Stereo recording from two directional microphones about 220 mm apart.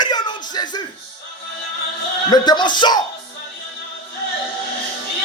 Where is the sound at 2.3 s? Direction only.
20° left (ahead or behind).